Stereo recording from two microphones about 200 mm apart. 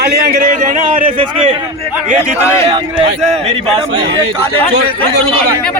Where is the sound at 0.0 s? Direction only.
55° right (ahead or behind).